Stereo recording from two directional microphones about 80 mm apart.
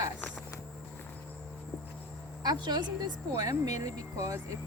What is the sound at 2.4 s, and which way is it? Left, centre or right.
Speech, right.